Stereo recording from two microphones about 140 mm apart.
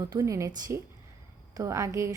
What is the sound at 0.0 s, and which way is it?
A woman's voice, 25° right (ahead or behind).